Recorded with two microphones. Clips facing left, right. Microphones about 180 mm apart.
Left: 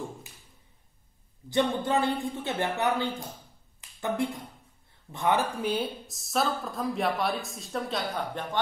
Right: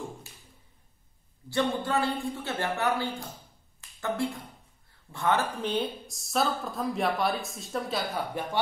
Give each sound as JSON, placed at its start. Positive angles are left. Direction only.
{"t": 1.5, "sound": "speech", "side_deg": 20}